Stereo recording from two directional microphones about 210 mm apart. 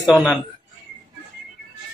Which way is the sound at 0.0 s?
Centre (ahead or behind).